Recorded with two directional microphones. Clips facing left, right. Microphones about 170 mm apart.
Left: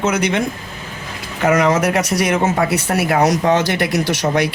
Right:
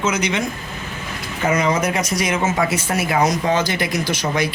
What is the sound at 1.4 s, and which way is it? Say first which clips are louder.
A man's voice: left 4 dB; 75° left (ahead or behind).